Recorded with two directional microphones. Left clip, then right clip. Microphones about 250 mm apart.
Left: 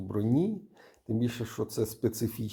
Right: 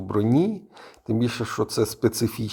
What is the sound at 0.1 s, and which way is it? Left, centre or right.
Speech, centre.